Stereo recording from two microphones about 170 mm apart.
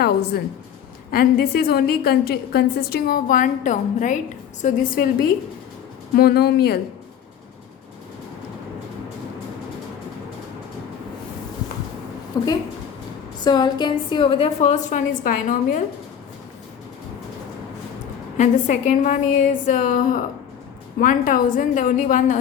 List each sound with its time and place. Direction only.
1.1 s a woman's voice: 65° left (ahead or behind)
6.1 s speech: 70° left (ahead or behind)
12.4 s a woman's voice: 20° left (ahead or behind); by 15.8 s 50° left (ahead or behind)
18.3 s a woman's voice: 45° left (ahead or behind)